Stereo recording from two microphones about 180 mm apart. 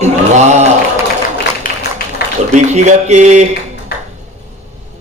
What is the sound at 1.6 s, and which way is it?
Tap, 50° left (ahead or behind).